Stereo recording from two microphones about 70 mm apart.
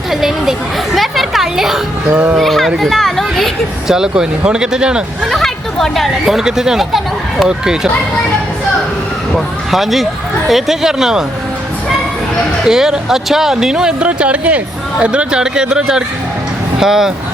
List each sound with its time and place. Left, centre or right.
0.1 s a woman's voice: centre
2.0 s a child's voice: right
2.4 s speech: centre
3.9 s speech: centre
5.3 s speech: centre
9.3 s speech: centre
12.6 s speech: centre